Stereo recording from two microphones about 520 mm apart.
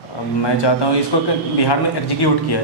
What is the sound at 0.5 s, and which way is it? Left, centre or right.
Speech, left.